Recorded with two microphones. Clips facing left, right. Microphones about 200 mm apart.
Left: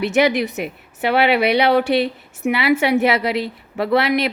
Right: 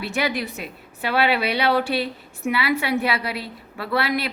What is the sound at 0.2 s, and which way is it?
A woman's voice, 20° left (ahead or behind).